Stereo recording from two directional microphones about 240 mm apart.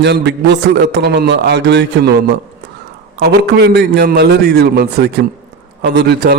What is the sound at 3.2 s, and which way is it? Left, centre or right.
A man's voice, right.